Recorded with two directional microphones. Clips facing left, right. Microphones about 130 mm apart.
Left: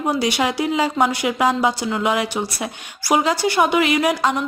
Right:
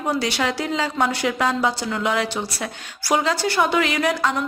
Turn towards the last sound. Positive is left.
turn(degrees=15)  # may be behind; listen again after turning